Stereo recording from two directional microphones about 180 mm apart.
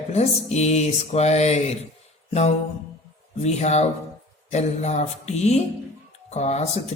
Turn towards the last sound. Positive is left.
turn(degrees=40)  # may be behind; listen again after turning